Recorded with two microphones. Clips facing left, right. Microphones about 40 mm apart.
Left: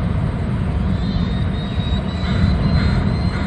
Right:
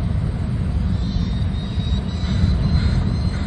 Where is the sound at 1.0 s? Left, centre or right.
Left.